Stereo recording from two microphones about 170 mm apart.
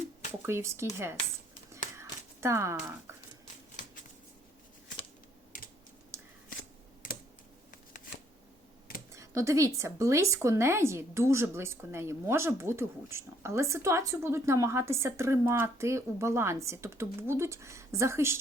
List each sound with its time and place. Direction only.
0.4 s speech: 15° right (ahead or behind)
1.7 s a sound: 15° right (ahead or behind)
6.1 s scissors: 15° right (ahead or behind)
7.0 s computer keyboard: 50° left (ahead or behind)
9.1 s speech: 15° right (ahead or behind)